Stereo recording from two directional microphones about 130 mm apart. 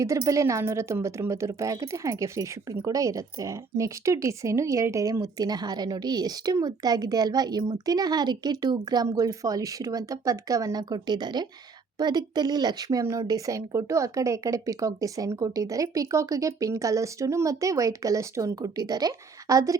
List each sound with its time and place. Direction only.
0.0 s a woman's voice: 25° right (ahead or behind)